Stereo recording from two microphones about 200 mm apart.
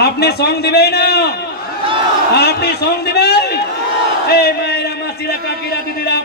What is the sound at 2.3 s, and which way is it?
A man's voice, 55° left (ahead or behind).